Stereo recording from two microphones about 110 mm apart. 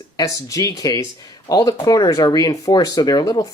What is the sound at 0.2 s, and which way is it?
Speech, 30° left (ahead or behind).